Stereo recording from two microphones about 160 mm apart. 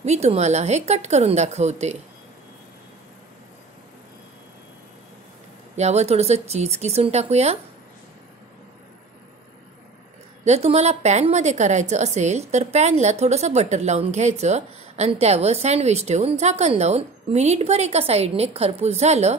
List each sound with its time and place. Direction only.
0.0 s a woman's voice: 45° right (ahead or behind)
5.8 s a woman's voice: 45° right (ahead or behind)
10.4 s a woman's voice: 40° right (ahead or behind)